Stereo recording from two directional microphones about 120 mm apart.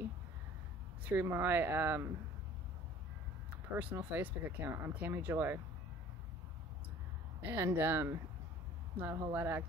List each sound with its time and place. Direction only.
1.0 s speech: 20° right (ahead or behind)
3.7 s speech: 15° right (ahead or behind)
7.4 s speech: 15° right (ahead or behind)